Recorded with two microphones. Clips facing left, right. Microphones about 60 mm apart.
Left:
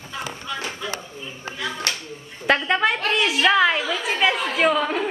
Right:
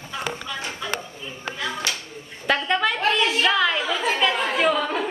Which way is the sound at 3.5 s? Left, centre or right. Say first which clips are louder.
Left 6 dB; left.